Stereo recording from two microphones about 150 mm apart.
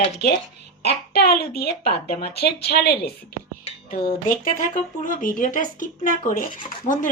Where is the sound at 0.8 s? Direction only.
90° left.